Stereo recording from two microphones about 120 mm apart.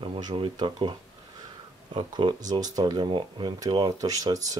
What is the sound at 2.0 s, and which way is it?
Speech, 40° right (ahead or behind).